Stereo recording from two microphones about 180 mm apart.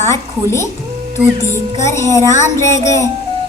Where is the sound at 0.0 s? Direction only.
15° left (ahead or behind).